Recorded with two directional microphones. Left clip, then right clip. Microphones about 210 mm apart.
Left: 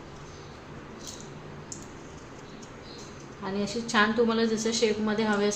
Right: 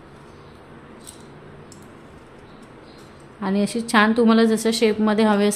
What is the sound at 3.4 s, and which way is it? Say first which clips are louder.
A woman's voice: right 8 dB; 50° right (ahead or behind).